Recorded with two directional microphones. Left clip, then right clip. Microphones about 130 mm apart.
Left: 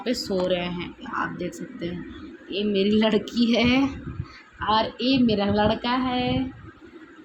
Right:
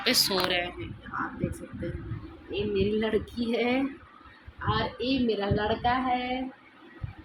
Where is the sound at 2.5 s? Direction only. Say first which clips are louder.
Left 4 dB; 90° left.